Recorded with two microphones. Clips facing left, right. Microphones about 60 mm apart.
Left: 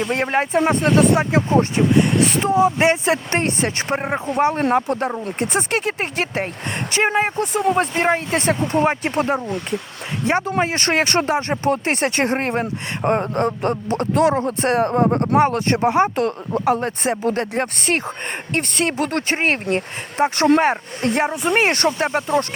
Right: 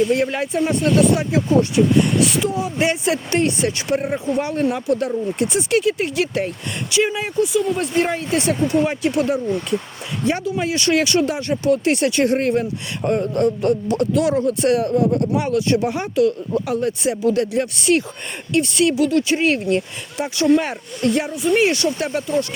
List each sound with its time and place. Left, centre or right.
0.0 s speech: left
21.8 s speech: left